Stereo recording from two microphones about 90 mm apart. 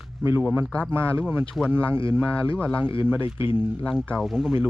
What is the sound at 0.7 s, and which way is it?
Speech, 15° left (ahead or behind).